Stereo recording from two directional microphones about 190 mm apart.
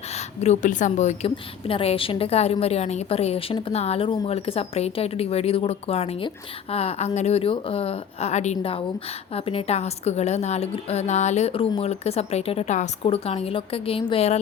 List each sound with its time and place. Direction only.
0.4 s a woman's voice: 40° left (ahead or behind)